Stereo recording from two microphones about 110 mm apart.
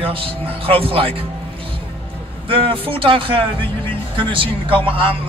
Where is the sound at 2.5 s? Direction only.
55° right (ahead or behind).